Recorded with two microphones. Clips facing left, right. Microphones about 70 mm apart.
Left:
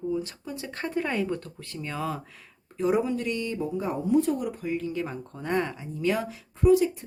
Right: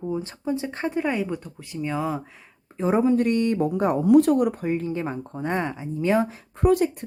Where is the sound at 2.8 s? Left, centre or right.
Right.